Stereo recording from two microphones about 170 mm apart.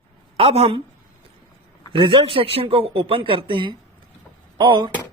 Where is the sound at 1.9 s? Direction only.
30° right (ahead or behind).